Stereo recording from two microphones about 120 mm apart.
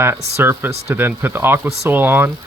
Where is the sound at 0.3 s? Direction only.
20° right (ahead or behind).